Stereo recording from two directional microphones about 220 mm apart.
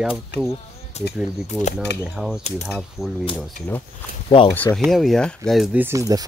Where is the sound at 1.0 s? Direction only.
30° left (ahead or behind).